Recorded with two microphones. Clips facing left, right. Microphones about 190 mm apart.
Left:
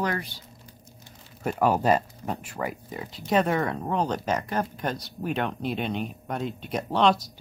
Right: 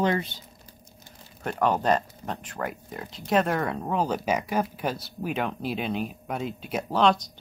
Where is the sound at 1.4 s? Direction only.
5° left (ahead or behind).